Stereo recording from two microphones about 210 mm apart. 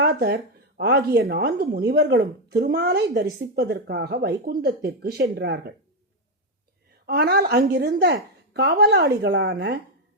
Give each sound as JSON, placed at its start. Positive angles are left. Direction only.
{"t": 0.0, "sound": "a woman's voice", "side_deg": -50}
{"t": 7.1, "sound": "a woman's voice", "side_deg": -50}